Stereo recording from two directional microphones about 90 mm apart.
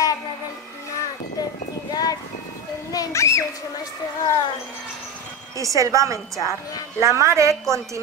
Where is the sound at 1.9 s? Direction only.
45° left (ahead or behind).